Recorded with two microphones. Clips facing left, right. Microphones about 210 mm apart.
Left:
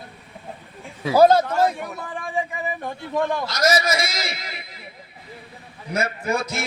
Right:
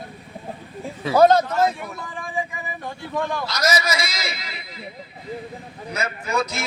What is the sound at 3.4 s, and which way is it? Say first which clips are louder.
A man's voice: left 2 dB; 50° left (ahead or behind).